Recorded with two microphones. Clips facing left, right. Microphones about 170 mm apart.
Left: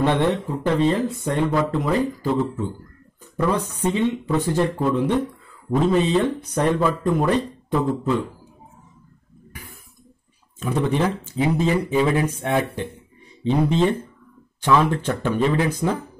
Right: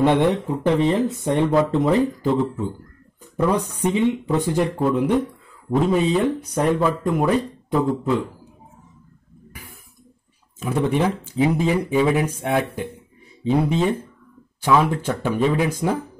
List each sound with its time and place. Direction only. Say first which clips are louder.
0.0 s speech: right 2 dB; 15° right (ahead or behind)
3.2 s speech: right 2 dB; 15° right (ahead or behind)
10.6 s speech: right 1 dB; 10° right (ahead or behind)